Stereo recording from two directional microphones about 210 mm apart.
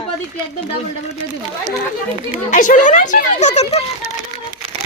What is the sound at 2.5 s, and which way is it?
Speech, 35° left (ahead or behind).